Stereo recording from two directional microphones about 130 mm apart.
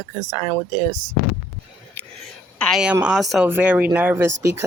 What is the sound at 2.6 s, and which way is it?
Speech, 5° right (ahead or behind).